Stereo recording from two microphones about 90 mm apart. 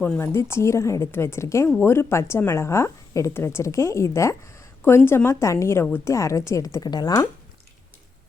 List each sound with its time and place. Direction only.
0.0 s a woman's voice: 25° left (ahead or behind)
6.8 s speech: 45° left (ahead or behind)